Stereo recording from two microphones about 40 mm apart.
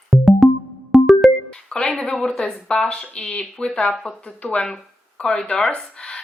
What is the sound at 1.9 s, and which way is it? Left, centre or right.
Speech, centre.